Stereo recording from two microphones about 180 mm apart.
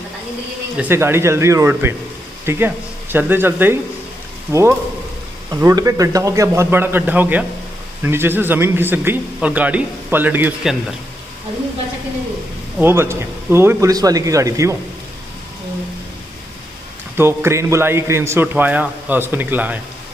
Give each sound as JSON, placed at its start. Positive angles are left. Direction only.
{"t": 0.7, "sound": "speech", "side_deg": -10}
{"t": 12.7, "sound": "speech", "side_deg": -15}
{"t": 17.2, "sound": "speech", "side_deg": -15}